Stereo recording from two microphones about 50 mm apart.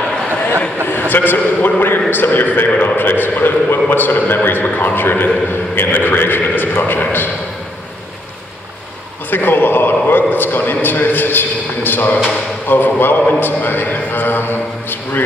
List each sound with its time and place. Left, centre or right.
0.8 s a man's voice: left
2.7 s a man's voice: left
3.0 s a man's voice: left
9.3 s a sound: left
12.6 s a man's voice: left